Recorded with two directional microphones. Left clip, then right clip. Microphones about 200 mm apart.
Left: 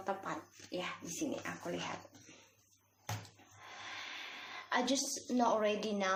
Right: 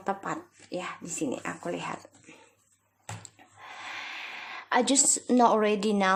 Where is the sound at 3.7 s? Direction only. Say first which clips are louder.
Right 7 dB; 45° right (ahead or behind).